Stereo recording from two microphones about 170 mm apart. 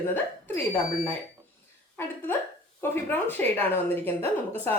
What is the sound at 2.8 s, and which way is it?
A woman's voice, 10° left (ahead or behind).